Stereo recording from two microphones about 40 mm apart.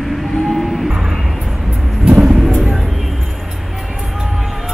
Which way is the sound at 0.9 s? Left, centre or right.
Right.